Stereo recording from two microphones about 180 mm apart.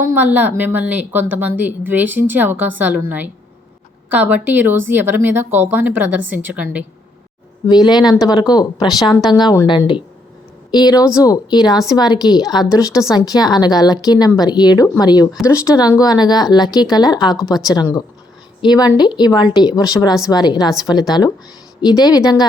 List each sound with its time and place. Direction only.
0.0 s a woman's voice: 10° right (ahead or behind)
7.7 s a woman's voice: 25° left (ahead or behind)